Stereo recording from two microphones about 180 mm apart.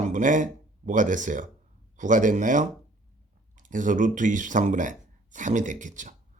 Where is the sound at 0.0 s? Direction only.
45° right (ahead or behind).